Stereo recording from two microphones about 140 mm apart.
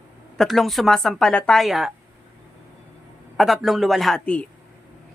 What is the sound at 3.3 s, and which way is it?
A woman's voice, centre (ahead or behind).